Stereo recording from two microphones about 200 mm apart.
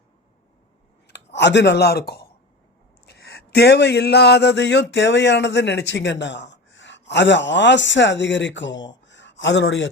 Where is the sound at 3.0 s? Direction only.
55° left (ahead or behind).